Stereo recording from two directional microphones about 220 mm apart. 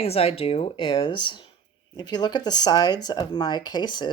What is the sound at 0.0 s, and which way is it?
Speech, 25° left (ahead or behind).